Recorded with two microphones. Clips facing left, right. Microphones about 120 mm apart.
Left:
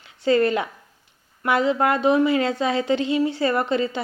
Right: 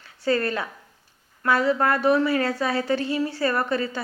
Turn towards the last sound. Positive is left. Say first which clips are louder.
# left 3 dB
turn(degrees=20)  # may be behind; listen again after turning